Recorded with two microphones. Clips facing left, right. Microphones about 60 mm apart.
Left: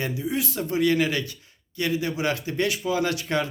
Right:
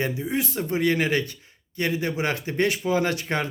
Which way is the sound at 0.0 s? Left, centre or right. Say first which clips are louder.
Right 1 dB; right.